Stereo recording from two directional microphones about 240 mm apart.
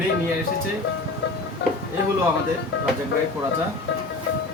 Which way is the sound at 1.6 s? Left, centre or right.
Left.